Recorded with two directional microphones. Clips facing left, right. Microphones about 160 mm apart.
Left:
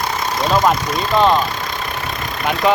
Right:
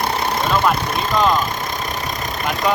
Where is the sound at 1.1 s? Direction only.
30° left (ahead or behind).